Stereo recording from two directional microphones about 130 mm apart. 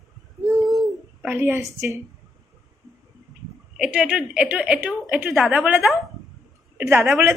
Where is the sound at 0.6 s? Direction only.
Centre (ahead or behind).